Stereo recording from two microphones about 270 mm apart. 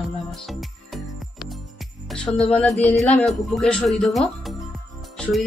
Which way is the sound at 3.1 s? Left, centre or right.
Centre.